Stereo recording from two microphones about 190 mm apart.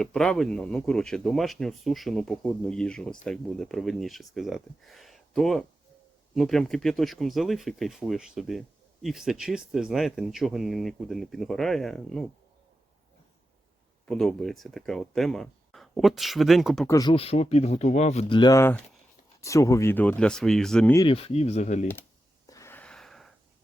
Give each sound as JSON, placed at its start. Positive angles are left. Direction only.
{"t": 0.0, "sound": "speech", "side_deg": 5}
{"t": 14.0, "sound": "speech", "side_deg": 5}
{"t": 16.8, "sound": "speech", "side_deg": 20}
{"t": 21.1, "sound": "speech", "side_deg": 30}
{"t": 22.4, "sound": "wheeze", "side_deg": 15}